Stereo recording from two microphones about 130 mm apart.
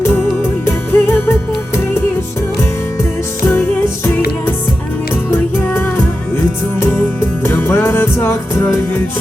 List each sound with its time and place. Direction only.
0.6 s music: 15° left (ahead or behind)
2.6 s music: 20° left (ahead or behind)
7.4 s music: 15° left (ahead or behind)